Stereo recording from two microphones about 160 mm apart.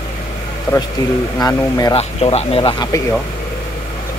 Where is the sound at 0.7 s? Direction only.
25° left (ahead or behind).